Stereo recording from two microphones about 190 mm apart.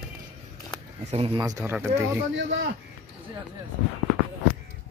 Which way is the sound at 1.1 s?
30° right (ahead or behind).